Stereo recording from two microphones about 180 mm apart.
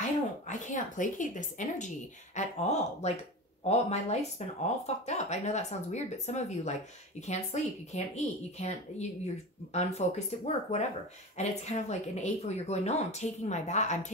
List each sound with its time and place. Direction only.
0.5 s speech: 45° left (ahead or behind)